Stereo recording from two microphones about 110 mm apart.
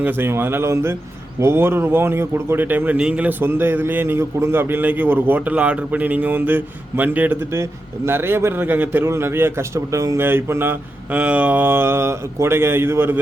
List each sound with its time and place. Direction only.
0.0 s a man's voice: 20° right (ahead or behind)